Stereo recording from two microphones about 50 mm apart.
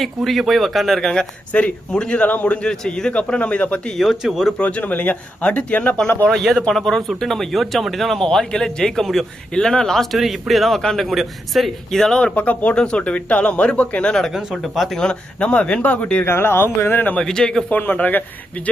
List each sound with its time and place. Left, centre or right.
0.3 s a man's voice: centre
1.5 s a man's voice: left
1.9 s speech: centre
2.6 s a man's voice: centre
3.9 s a man's voice: centre
4.6 s speech: left
6.4 s a man's voice: centre
12.2 s speech: left
12.7 s speech: centre
14.3 s a man's voice: centre
14.9 s speech: centre
16.2 s speech: left
17.2 s a man's voice: centre
17.7 s a man's voice: left